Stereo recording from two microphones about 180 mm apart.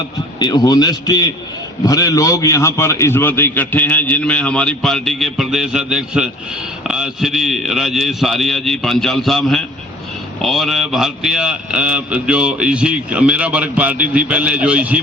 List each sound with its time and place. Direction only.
0.3 s a man's voice: 20° left (ahead or behind); by 14.9 s 5° right (ahead or behind)